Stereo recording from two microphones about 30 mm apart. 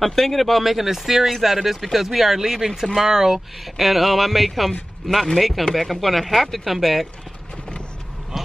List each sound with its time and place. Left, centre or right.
0.0 s speech: centre
3.6 s speech: centre